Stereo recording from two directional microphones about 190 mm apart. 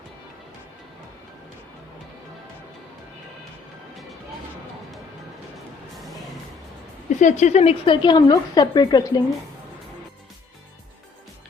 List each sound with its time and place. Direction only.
7.2 s a woman's voice: 40° left (ahead or behind); by 9.2 s 20° left (ahead or behind)